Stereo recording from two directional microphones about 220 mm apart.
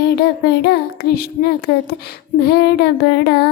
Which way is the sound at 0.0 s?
45° left (ahead or behind).